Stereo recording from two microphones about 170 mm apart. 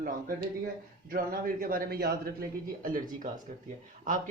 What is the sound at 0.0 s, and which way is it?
A man's voice, 60° right (ahead or behind).